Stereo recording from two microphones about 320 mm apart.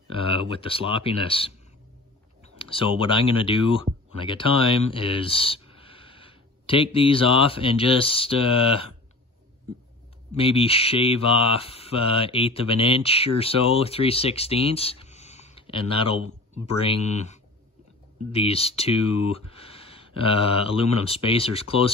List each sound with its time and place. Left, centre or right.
0.1 s speech: centre
10.3 s speech: centre